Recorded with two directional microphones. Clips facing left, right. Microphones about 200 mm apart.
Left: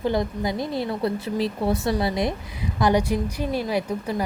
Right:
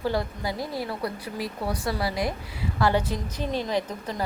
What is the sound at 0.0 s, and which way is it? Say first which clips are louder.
Speech: left 4 dB; 20° left (ahead or behind).